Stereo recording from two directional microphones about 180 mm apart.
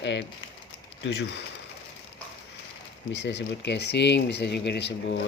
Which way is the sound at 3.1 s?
75° left (ahead or behind).